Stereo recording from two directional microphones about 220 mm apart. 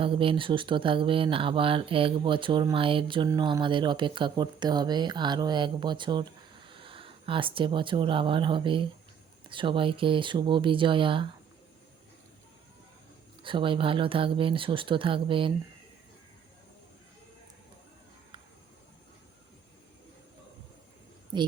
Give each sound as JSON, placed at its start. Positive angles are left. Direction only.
{"t": 0.0, "sound": "speech", "side_deg": -25}
{"t": 13.4, "sound": "speech", "side_deg": -20}